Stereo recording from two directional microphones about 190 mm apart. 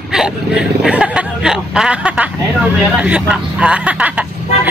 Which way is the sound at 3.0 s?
5° right (ahead or behind).